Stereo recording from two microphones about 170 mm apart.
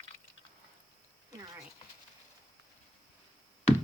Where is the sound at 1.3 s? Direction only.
20° right (ahead or behind).